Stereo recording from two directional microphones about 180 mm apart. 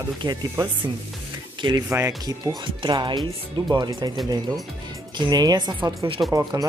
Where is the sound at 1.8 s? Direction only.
15° right (ahead or behind).